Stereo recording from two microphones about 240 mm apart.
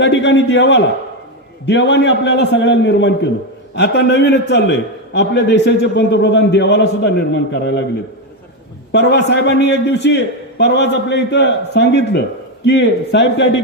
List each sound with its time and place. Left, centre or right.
0.0 s a man's voice: left
8.9 s a man's voice: left